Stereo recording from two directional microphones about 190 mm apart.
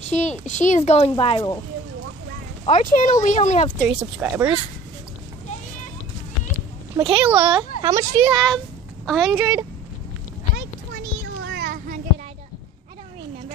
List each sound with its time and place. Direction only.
0.0 s a child's voice: 35° left (ahead or behind)
2.6 s a child's voice: 40° left (ahead or behind)
3.8 s speech: 5° right (ahead or behind)
7.0 s speech: 5° right (ahead or behind)
9.0 s speech: centre (ahead or behind)
11.4 s children playing: 55° right (ahead or behind)